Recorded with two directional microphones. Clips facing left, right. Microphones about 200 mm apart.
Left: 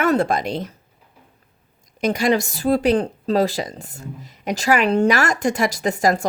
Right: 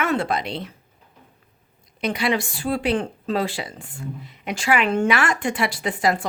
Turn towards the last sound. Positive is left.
turn(degrees=45)  # may be behind; listen again after turning